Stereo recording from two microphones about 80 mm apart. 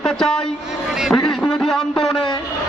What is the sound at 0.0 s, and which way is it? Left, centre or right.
A man's voice, centre.